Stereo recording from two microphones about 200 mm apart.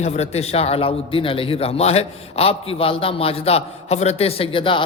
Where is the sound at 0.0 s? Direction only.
35° left (ahead or behind).